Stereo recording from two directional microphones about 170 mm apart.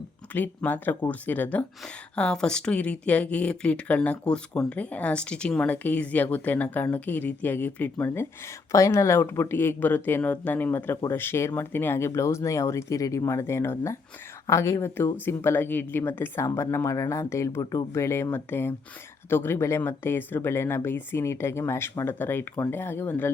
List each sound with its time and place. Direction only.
0.3 s speech: 10° left (ahead or behind)